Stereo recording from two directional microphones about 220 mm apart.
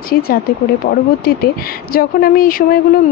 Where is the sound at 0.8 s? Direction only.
45° left (ahead or behind).